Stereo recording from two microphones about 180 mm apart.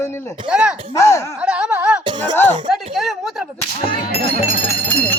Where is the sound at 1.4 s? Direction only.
5° right (ahead or behind).